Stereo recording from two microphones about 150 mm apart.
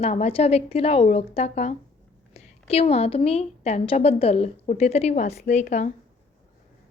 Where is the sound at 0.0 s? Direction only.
45° left (ahead or behind).